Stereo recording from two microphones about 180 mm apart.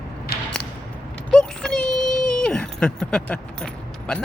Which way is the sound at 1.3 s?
5° left (ahead or behind).